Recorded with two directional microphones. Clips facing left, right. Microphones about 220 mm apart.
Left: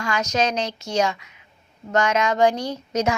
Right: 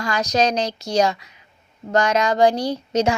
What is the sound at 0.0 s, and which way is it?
A woman's voice, 35° right (ahead or behind).